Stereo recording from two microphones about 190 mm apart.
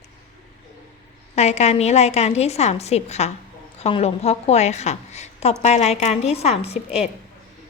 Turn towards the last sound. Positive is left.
turn(degrees=35)  # may be behind; listen again after turning